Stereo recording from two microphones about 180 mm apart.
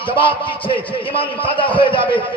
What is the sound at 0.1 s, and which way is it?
A man's voice, 30° left (ahead or behind).